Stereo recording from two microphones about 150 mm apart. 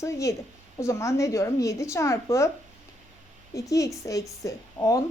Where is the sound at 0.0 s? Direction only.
20° left (ahead or behind).